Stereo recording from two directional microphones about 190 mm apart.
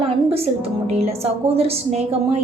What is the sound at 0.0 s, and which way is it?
A woman's voice, 30° right (ahead or behind).